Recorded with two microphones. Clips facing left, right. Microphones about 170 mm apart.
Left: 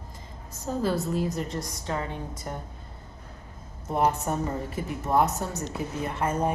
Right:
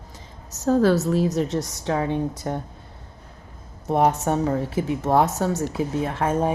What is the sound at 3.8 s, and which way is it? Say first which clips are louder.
A woman's voice: right 5 dB; 70° right (ahead or behind).